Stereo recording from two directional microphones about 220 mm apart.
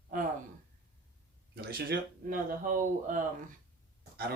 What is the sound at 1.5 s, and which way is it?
Speech, 45° right (ahead or behind).